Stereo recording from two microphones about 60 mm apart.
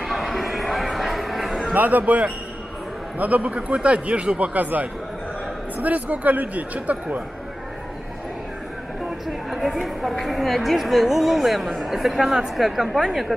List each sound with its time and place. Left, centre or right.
0.0 s a sound: centre
1.7 s speech: right
9.5 s a woman's voice: centre